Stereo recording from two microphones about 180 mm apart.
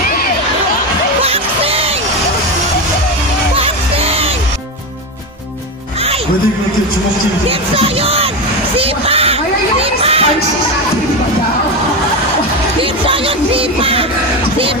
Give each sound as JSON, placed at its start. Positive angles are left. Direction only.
{"t": 1.2, "sound": "music", "side_deg": -35}
{"t": 3.5, "sound": "music", "side_deg": -30}
{"t": 7.4, "sound": "speech", "side_deg": -30}
{"t": 8.7, "sound": "a sound", "side_deg": -30}
{"t": 13.0, "sound": "music", "side_deg": -30}